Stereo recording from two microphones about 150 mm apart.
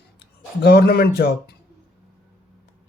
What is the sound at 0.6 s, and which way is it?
Speech, 90° left.